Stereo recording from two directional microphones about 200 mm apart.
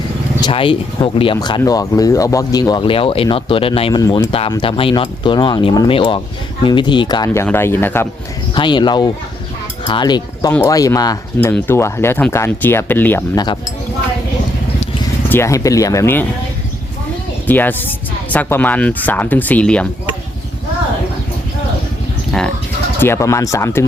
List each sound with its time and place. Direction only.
0.4 s speech: 25° left (ahead or behind)
8.5 s speech: 20° left (ahead or behind)
9.8 s cutlery: 20° left (ahead or behind)
10.5 s speech: 15° left (ahead or behind)
13.3 s speech: 20° left (ahead or behind)
15.3 s speech: 15° left (ahead or behind)
17.4 s speech: 10° left (ahead or behind)
22.3 s speech: 5° left (ahead or behind)